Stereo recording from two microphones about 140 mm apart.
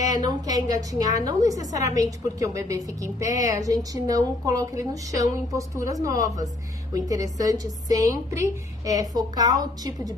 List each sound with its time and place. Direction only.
0.2 s a woman's voice: 25° right (ahead or behind)